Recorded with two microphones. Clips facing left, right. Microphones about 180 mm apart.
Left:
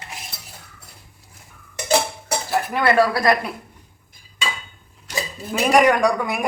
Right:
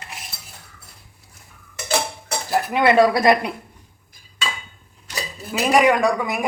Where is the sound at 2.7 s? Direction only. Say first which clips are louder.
Right 3 dB; 20° right (ahead or behind).